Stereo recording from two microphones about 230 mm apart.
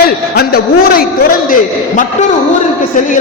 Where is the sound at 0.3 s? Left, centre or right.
Left.